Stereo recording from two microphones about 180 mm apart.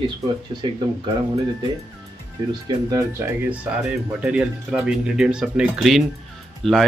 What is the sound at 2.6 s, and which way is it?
Speech, 20° right (ahead or behind).